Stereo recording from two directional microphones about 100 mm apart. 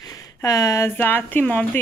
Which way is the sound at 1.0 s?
20° left (ahead or behind).